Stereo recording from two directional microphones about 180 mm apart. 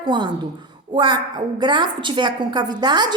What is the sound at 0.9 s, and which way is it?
A woman's voice, 25° right (ahead or behind).